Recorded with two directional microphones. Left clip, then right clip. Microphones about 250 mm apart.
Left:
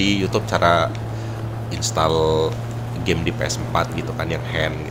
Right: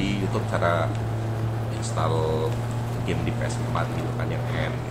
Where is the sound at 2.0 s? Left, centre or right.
Left.